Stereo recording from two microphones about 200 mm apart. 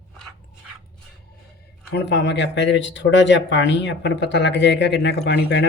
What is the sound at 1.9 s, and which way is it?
Speech, 60° left (ahead or behind).